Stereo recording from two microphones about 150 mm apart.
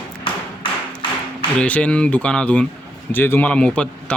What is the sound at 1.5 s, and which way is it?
Speech, 10° left (ahead or behind).